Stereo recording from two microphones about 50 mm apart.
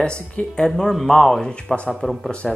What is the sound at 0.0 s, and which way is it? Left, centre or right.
Speech, centre.